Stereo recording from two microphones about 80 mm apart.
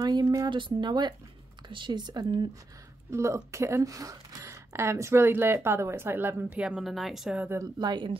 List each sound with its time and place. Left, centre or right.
0.0 s speech: right
0.6 s speech: right
1.7 s speech: right
3.1 s a woman's voice: right
6.6 s speech: centre
7.8 s speech: right